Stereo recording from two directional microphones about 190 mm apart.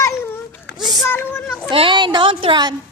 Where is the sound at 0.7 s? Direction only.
55° left (ahead or behind).